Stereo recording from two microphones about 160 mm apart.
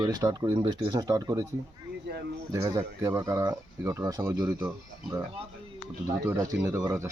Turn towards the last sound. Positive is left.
turn(degrees=-20)  # may be behind; listen again after turning